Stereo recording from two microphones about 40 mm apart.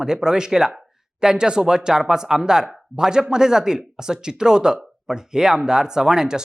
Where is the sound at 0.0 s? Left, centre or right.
Centre.